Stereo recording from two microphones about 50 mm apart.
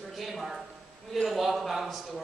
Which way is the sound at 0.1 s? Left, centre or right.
Centre.